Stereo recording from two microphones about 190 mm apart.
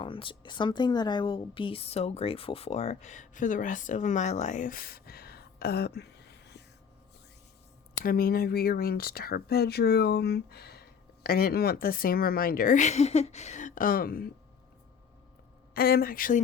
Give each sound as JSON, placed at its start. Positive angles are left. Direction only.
{"t": 0.0, "sound": "a woman's voice", "side_deg": 25}
{"t": 8.0, "sound": "speech", "side_deg": 50}
{"t": 15.7, "sound": "speech", "side_deg": 50}